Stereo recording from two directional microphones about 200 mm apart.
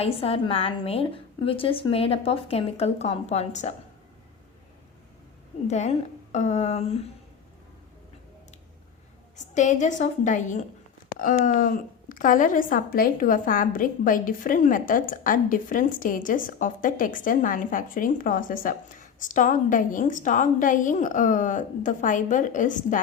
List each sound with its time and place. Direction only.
0.0 s speech: 30° left (ahead or behind)
5.6 s a woman's voice: 35° left (ahead or behind)
9.3 s a woman's voice: 40° left (ahead or behind)